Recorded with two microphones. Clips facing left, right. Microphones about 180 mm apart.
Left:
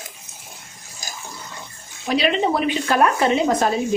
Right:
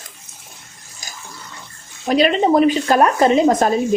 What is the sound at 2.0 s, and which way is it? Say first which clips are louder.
Speech: right 4 dB; 45° right (ahead or behind).